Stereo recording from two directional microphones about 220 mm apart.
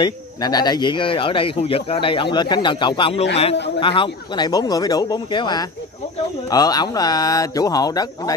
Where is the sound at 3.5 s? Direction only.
50° left (ahead or behind).